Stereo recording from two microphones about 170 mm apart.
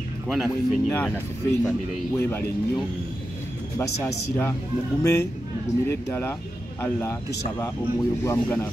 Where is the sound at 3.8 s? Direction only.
15° left (ahead or behind).